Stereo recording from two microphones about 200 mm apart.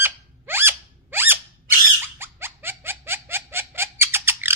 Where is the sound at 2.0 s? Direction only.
10° right (ahead or behind).